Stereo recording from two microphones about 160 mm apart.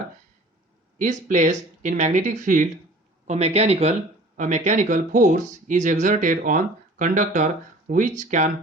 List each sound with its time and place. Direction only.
0.9 s speech: 50° right (ahead or behind)
3.2 s a man's voice: 40° right (ahead or behind)